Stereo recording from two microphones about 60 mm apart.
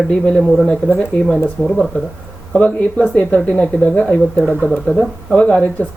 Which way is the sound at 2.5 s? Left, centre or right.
Centre.